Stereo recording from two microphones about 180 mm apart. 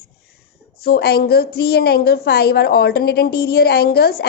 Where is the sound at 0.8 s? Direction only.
60° left (ahead or behind).